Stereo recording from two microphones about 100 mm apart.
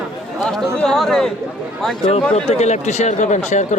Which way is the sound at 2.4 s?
90° left.